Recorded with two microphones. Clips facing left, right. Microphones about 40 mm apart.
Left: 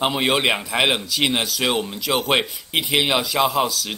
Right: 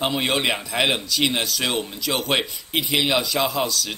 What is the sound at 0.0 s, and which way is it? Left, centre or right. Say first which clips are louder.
A man's voice: left 3 dB; centre.